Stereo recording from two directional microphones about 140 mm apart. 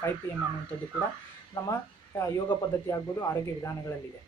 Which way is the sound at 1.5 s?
20° left (ahead or behind).